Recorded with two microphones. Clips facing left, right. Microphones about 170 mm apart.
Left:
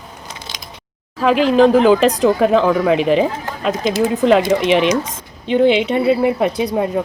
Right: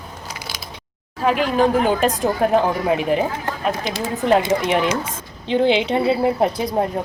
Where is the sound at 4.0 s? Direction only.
75° left (ahead or behind).